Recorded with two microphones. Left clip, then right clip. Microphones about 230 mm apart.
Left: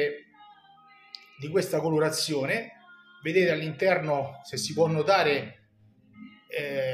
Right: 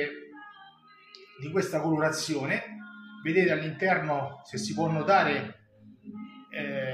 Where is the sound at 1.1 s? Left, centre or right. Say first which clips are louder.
Left 3 dB; left.